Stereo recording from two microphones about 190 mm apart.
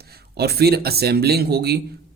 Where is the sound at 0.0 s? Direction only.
55° right (ahead or behind).